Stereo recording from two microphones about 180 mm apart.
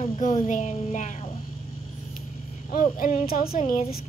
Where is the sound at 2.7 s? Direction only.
45° left (ahead or behind).